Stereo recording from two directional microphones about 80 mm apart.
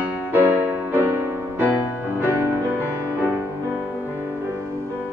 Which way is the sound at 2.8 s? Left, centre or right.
Left.